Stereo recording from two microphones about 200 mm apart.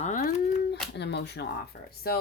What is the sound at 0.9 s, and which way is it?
Speech, 55° left (ahead or behind).